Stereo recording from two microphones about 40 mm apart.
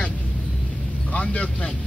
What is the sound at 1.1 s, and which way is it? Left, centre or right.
Speech, left.